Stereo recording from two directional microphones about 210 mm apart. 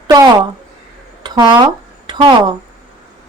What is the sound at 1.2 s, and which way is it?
Speech, 20° right (ahead or behind).